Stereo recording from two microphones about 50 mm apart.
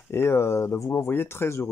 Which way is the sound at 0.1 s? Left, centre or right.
Left.